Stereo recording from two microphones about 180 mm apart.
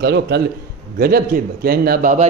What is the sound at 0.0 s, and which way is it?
Speech, 70° right (ahead or behind).